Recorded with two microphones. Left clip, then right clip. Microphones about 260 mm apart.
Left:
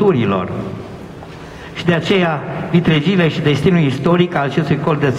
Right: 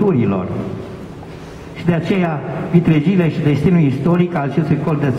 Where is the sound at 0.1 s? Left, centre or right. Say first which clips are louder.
Left 2 dB; centre.